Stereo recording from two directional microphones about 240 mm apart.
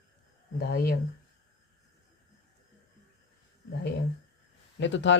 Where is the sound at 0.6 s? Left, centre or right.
Left.